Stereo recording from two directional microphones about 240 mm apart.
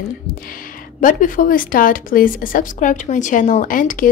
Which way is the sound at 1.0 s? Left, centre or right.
Left.